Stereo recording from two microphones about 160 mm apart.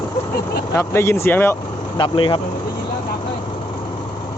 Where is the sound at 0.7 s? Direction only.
15° left (ahead or behind).